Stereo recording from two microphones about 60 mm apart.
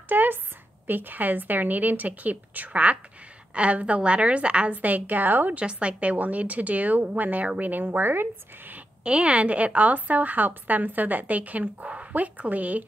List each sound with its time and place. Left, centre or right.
0.1 s a sound: right
0.8 s a woman's voice: right
5.6 s a woman's voice: centre
9.0 s a woman's voice: centre